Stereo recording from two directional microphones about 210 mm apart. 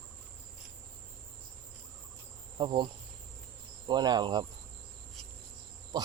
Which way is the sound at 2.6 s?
20° right (ahead or behind).